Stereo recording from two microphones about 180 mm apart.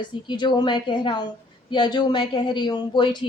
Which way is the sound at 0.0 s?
25° left (ahead or behind).